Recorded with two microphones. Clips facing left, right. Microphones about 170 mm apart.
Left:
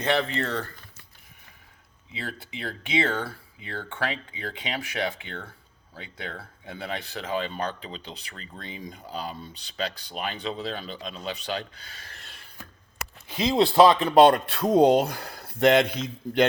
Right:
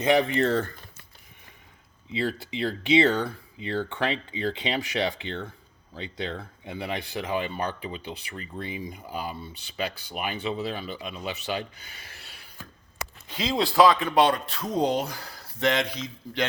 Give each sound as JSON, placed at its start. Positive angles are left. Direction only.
{"t": 0.0, "sound": "speech", "side_deg": -15}
{"t": 2.1, "sound": "speech", "side_deg": -30}
{"t": 13.3, "sound": "speech", "side_deg": 20}
{"t": 14.2, "sound": "speech", "side_deg": 55}